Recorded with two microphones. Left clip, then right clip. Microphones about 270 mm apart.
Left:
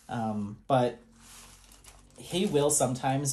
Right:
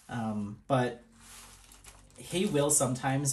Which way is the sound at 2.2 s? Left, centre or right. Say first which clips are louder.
Left 2 dB; centre.